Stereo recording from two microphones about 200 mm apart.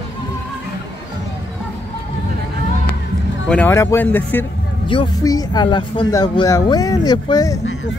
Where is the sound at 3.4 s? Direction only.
10° left (ahead or behind).